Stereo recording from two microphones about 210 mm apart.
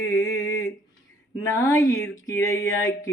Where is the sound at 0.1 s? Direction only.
15° left (ahead or behind).